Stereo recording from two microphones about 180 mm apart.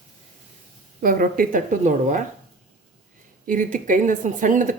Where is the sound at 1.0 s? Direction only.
50° right (ahead or behind).